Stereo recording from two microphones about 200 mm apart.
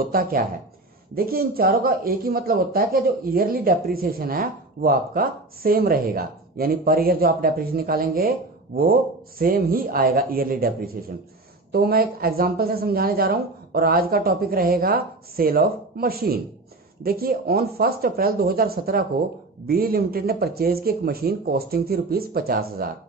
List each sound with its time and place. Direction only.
0.0 s speech: 45° right (ahead or behind)
9.4 s speech: 45° right (ahead or behind)